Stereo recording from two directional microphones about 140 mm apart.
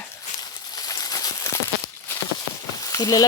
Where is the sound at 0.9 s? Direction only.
30° left (ahead or behind).